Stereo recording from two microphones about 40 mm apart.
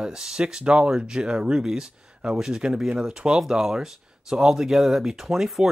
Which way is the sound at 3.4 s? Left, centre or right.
Centre.